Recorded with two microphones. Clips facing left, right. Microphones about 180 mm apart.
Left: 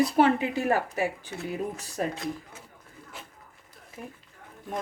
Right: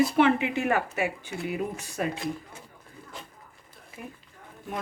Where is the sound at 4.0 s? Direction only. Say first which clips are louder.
Even; 35° left (ahead or behind).